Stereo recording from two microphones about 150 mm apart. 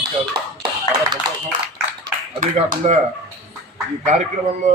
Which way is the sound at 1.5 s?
65° right (ahead or behind).